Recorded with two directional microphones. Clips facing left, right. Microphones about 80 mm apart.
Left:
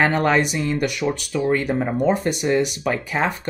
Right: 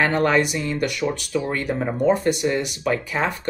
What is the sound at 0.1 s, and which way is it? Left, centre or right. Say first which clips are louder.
Speech: even; centre.